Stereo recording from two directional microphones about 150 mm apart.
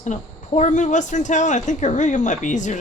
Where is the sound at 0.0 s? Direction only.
50° left (ahead or behind).